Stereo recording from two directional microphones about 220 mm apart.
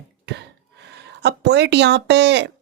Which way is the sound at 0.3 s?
50° right (ahead or behind).